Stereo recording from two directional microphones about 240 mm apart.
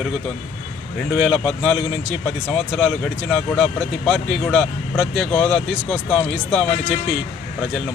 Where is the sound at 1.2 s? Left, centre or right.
Centre.